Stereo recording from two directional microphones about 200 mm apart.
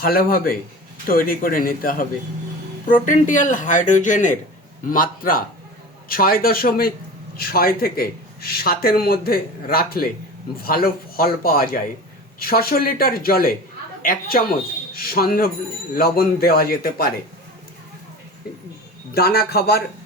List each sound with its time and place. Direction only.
0.0 s speech: 45° left (ahead or behind)
19.1 s speech: 50° left (ahead or behind)